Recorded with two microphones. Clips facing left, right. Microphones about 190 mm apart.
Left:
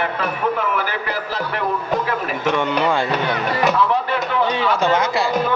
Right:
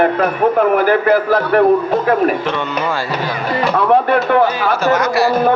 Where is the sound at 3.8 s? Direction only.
55° right (ahead or behind).